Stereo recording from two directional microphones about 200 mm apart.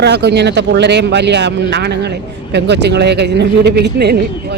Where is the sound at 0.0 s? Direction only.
55° right (ahead or behind).